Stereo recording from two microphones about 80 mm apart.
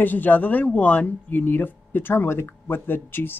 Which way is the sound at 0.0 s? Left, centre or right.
Left.